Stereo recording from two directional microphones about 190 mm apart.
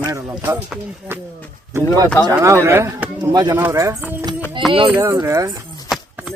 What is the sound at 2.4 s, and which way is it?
Speech, 15° right (ahead or behind).